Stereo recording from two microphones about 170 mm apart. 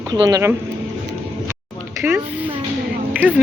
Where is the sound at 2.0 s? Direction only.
10° right (ahead or behind).